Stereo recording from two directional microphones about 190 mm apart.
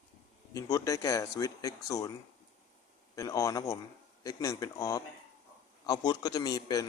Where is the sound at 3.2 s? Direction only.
15° left (ahead or behind).